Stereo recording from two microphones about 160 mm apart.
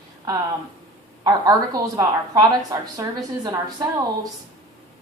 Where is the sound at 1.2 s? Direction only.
25° right (ahead or behind).